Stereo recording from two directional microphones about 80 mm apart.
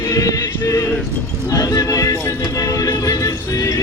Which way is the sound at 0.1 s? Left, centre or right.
Left.